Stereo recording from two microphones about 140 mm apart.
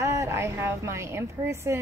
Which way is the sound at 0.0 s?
20° right (ahead or behind).